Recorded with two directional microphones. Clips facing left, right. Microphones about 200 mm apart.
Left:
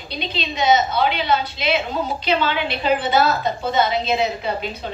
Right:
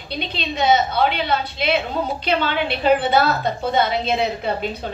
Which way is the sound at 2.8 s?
60° right (ahead or behind).